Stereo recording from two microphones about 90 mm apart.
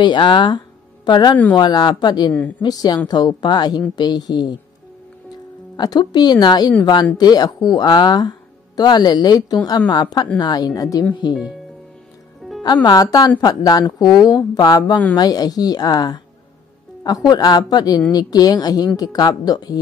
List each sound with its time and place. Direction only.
0.0 s a woman's voice: 65° left (ahead or behind)
5.8 s a woman's voice: 50° left (ahead or behind)
12.4 s music: centre (ahead or behind)
12.8 s a woman's voice: 45° left (ahead or behind)
17.3 s a woman's voice: 50° left (ahead or behind)